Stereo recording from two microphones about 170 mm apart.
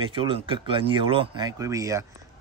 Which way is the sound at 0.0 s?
30° right (ahead or behind).